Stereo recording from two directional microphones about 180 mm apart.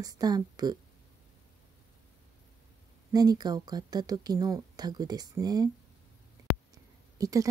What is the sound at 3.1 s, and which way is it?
Speech, 20° right (ahead or behind).